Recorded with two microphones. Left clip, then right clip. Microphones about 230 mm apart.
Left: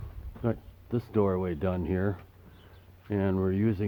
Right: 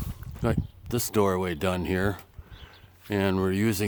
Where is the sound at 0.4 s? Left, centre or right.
Right.